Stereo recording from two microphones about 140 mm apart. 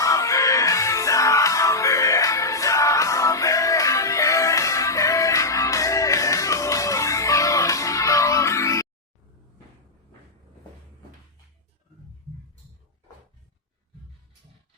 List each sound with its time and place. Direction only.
0.0 s music: 25° left (ahead or behind)